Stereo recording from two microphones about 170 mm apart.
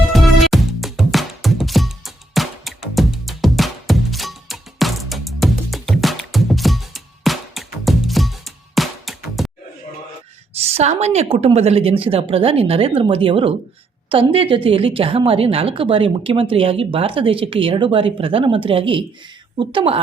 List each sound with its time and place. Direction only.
0.1 s music: centre (ahead or behind)
10.6 s a woman's voice: 35° right (ahead or behind)